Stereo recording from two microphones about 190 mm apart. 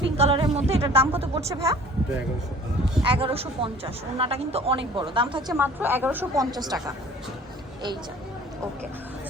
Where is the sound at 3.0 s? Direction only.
30° right (ahead or behind).